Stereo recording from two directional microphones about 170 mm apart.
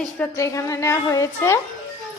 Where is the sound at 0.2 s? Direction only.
20° left (ahead or behind).